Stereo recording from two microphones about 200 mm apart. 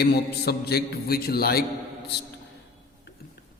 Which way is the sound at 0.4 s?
50° left (ahead or behind).